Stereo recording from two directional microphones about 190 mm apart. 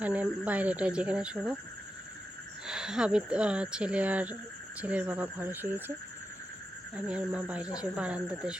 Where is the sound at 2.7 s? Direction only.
5° right (ahead or behind).